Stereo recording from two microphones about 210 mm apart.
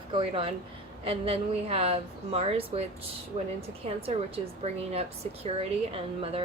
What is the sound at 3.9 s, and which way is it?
A woman's voice, 30° right (ahead or behind).